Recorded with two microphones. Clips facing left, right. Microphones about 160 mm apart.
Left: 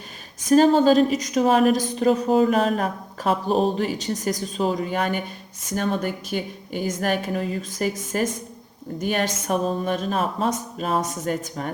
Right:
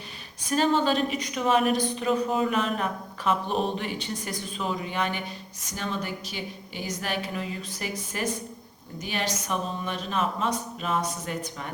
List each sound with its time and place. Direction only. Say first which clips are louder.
0.4 s a woman's voice: left 8 dB; 40° left (ahead or behind)